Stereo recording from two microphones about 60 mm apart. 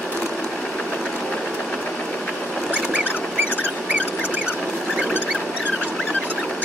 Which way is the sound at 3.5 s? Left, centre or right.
Right.